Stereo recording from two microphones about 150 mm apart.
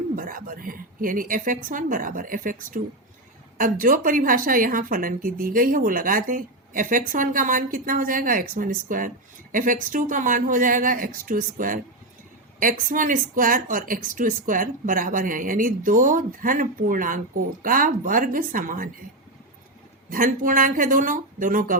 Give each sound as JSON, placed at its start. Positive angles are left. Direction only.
{"t": 0.2, "sound": "a woman's voice", "side_deg": -70}
{"t": 20.1, "sound": "a woman's voice", "side_deg": -65}